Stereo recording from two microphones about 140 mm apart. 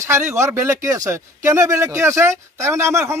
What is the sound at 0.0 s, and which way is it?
A man's voice, 20° right (ahead or behind).